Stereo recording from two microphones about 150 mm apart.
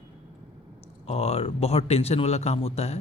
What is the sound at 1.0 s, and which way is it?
A man's voice, 45° left (ahead or behind).